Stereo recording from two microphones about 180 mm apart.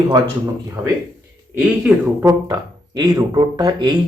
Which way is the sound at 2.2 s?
20° right (ahead or behind).